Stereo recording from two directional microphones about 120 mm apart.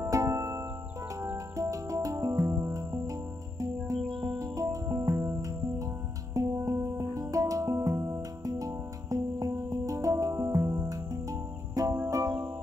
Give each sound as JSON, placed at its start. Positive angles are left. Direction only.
{"t": 0.0, "sound": "music", "side_deg": -25}